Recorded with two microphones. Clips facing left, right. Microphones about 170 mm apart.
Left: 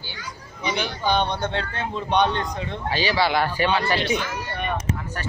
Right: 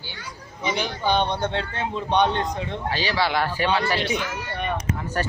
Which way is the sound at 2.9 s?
5° left (ahead or behind).